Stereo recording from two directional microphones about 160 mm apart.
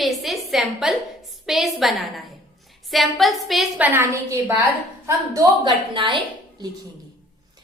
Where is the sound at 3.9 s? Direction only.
15° right (ahead or behind).